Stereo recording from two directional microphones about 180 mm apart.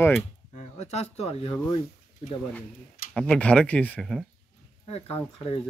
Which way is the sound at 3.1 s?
5° left (ahead or behind).